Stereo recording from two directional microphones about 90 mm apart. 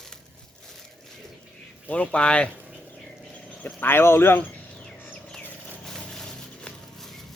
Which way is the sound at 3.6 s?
20° left (ahead or behind).